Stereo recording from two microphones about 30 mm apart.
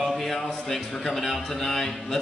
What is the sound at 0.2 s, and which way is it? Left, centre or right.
A man's voice, centre.